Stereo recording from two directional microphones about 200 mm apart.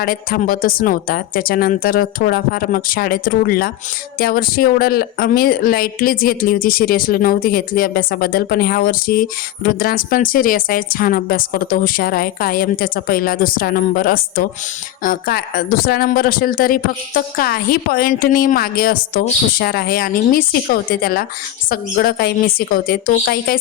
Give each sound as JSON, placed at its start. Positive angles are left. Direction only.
{"t": 0.0, "sound": "a woman's voice", "side_deg": 45}